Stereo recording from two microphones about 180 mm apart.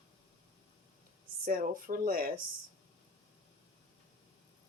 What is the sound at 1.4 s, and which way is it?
Speech, 50° right (ahead or behind).